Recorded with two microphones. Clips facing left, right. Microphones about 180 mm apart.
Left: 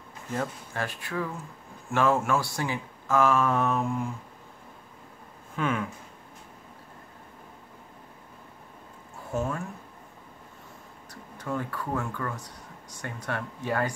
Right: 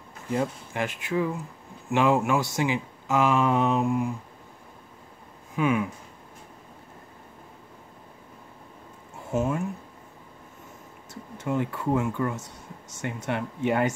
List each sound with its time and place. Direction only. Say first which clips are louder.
0.3 s speech: right 4 dB; 15° right (ahead or behind)
3.8 s a sound: right 5 dB; 5° right (ahead or behind)
5.6 s speech: right 5 dB; 10° right (ahead or behind)
9.3 s speech: right 4 dB; 20° right (ahead or behind)
11.3 s speech: right 4 dB; 20° right (ahead or behind)